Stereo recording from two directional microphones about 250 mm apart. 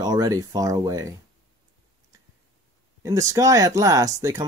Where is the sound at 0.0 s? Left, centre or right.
Centre.